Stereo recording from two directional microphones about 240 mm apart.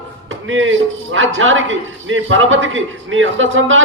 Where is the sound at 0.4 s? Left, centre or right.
Right.